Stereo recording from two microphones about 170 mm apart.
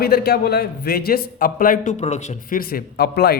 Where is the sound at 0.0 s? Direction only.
65° left (ahead or behind).